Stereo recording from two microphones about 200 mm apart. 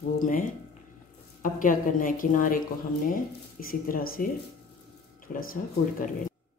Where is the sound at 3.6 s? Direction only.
45° left (ahead or behind).